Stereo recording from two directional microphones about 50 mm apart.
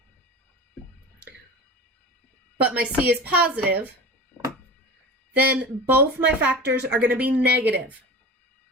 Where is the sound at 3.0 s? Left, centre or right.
Right.